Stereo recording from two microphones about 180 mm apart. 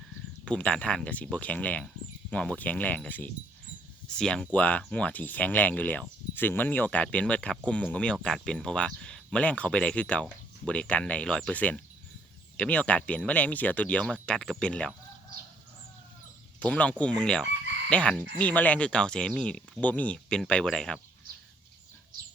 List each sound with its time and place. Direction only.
0.4 s speech: 5° left (ahead or behind)
16.6 s speech: 5° left (ahead or behind)